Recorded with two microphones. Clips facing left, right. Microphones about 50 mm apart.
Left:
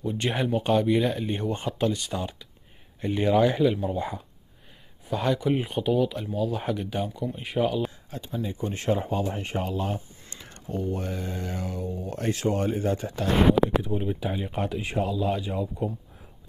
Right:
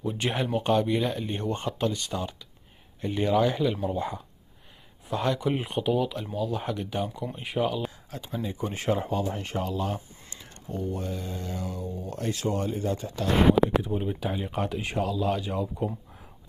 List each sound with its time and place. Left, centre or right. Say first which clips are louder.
0.0 s speech: left 1 dB; centre
9.1 s speech: left 1 dB; centre
10.7 s mantra: left 2 dB; left
12.1 s speech: left 3 dB; left
13.8 s speech: left 1 dB; centre